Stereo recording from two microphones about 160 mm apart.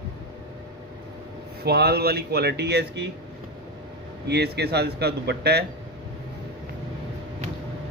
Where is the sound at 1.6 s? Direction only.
80° right.